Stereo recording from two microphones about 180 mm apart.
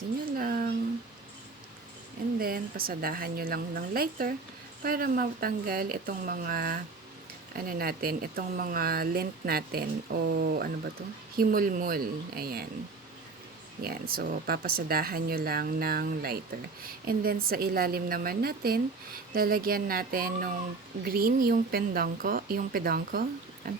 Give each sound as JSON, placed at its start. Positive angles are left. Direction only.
{"t": 0.3, "sound": "a sound", "side_deg": -55}
{"t": 2.4, "sound": "speech", "side_deg": -55}
{"t": 13.8, "sound": "speech", "side_deg": -55}